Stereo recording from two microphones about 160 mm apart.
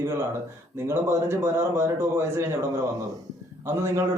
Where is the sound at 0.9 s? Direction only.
15° right (ahead or behind).